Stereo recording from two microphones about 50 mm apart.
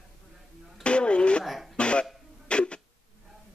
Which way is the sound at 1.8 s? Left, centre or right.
Left.